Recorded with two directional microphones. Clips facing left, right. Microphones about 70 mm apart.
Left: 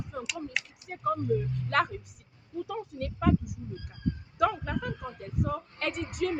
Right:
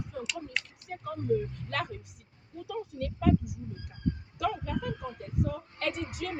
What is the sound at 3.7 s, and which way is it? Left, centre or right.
Speech, right.